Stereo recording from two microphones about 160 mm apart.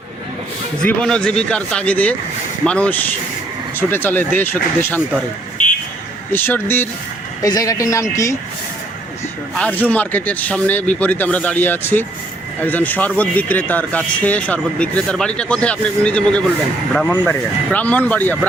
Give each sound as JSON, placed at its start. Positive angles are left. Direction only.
{"t": 0.8, "sound": "speech", "side_deg": 5}
{"t": 6.3, "sound": "speech", "side_deg": 15}
{"t": 7.4, "sound": "speech", "side_deg": 25}
{"t": 9.6, "sound": "speech", "side_deg": 10}